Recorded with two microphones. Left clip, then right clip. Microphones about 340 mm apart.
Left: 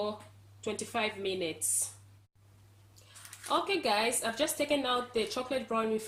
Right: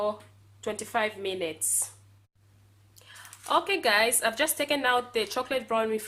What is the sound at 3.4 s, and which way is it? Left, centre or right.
A woman's voice, right.